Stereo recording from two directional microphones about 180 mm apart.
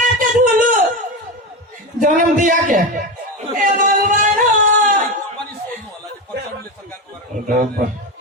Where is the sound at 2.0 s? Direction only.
50° right (ahead or behind).